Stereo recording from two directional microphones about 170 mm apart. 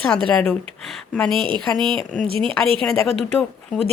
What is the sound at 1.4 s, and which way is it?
Speech, 30° right (ahead or behind).